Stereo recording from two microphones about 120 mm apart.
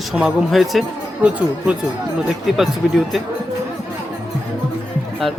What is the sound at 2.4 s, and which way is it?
Speech, centre (ahead or behind).